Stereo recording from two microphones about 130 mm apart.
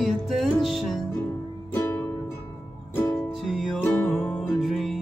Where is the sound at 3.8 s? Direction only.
15° left (ahead or behind).